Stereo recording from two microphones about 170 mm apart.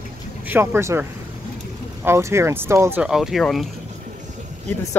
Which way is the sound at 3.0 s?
5° right (ahead or behind).